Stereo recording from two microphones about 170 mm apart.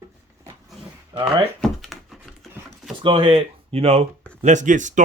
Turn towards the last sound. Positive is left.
turn(degrees=-45)  # may be behind; listen again after turning